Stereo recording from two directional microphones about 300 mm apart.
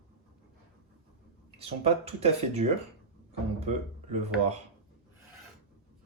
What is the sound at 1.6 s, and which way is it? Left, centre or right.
Speech, centre.